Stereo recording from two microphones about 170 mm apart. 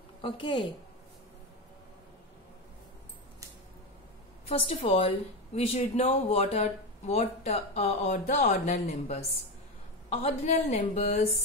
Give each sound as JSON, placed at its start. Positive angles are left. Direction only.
{"t": 0.2, "sound": "speech", "side_deg": 30}
{"t": 4.5, "sound": "speech", "side_deg": 35}